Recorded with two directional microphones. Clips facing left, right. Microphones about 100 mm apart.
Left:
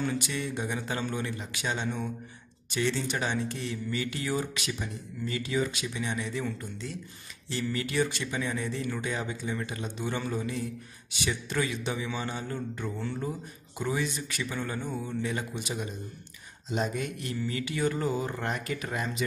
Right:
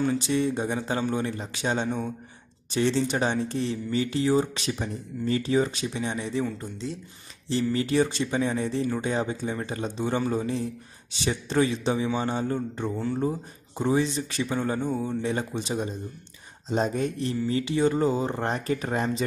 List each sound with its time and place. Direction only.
0.0 s a man's voice: 30° right (ahead or behind)